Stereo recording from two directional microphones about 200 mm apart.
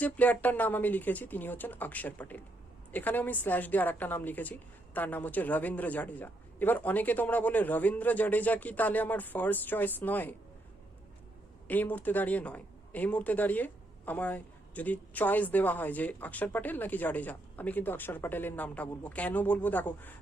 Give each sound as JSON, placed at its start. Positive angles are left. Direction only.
{"t": 0.0, "sound": "speech", "side_deg": 10}
{"t": 11.7, "sound": "speech", "side_deg": 10}